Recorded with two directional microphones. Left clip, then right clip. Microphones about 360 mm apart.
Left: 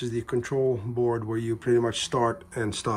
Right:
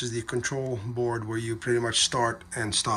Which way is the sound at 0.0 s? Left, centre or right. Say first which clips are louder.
Left 1 dB; centre.